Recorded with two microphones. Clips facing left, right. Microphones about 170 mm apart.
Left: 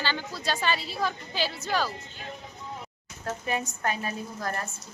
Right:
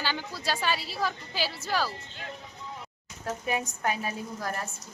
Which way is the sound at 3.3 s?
10° right (ahead or behind).